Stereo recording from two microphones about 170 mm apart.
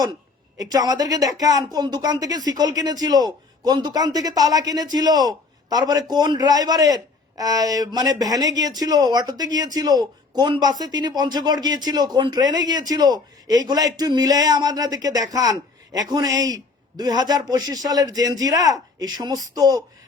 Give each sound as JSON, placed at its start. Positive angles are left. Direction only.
{"t": 0.0, "sound": "a woman's voice", "side_deg": -20}